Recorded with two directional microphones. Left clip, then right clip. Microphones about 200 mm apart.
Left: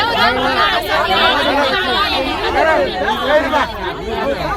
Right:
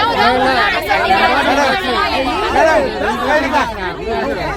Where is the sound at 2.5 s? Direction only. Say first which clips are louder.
Right 2 dB; 55° right (ahead or behind).